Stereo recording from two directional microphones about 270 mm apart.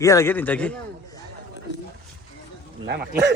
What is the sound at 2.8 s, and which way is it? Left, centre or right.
Speech, right.